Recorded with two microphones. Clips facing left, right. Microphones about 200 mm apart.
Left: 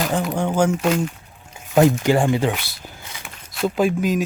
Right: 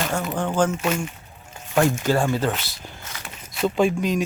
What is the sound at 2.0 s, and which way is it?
Speech, 15° left (ahead or behind).